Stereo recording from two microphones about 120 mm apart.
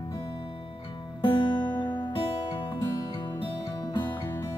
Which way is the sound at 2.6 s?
40° left (ahead or behind).